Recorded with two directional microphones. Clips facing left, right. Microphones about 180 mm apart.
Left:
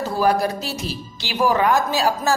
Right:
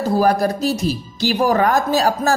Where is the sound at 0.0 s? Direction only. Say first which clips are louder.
Right 3 dB; 40° right (ahead or behind).